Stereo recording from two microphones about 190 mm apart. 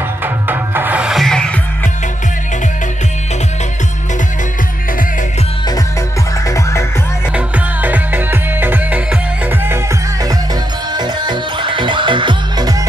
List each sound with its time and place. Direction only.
0.2 s music: 10° right (ahead or behind)
6.4 s music: 15° left (ahead or behind)
7.3 s music: 10° right (ahead or behind)